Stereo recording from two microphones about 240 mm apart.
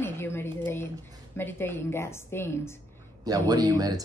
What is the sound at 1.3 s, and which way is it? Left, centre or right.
A woman's voice, centre.